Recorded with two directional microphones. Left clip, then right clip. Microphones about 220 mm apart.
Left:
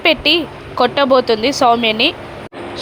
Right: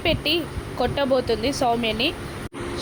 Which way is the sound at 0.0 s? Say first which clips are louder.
Left 10 dB; 15° left (ahead or behind).